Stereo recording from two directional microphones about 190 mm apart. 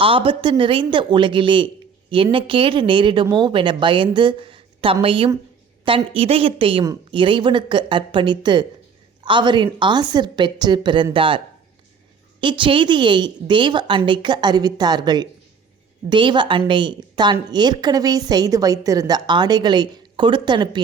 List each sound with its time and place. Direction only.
0.0 s a woman's voice: 25° right (ahead or behind)